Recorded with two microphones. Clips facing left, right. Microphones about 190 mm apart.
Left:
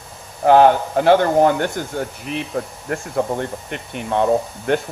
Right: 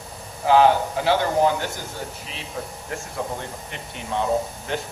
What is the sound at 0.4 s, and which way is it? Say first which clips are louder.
Speech: left 4 dB; 55° left (ahead or behind).